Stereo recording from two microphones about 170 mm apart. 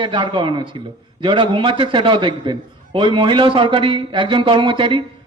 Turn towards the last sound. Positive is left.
turn(degrees=-30)  # may be behind; listen again after turning